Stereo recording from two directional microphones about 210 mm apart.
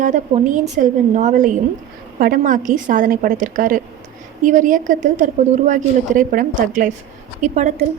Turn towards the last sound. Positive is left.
turn(degrees=-35)  # may be behind; listen again after turning